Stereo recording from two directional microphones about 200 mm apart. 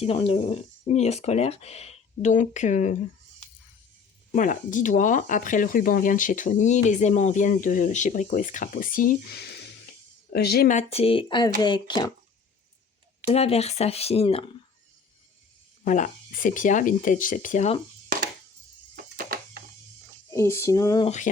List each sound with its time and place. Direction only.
0.0 s speech: 25° left (ahead or behind)
4.3 s speech: 40° left (ahead or behind); by 12.1 s 20° left (ahead or behind)
13.2 s speech: 30° left (ahead or behind)
15.8 s speech: 40° left (ahead or behind)
19.1 s a sound: 45° right (ahead or behind)
20.3 s a sound: 15° left (ahead or behind)